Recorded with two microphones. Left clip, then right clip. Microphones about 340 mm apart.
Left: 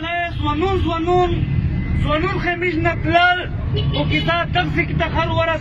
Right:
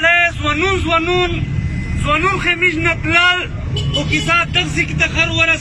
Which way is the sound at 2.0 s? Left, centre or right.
Centre.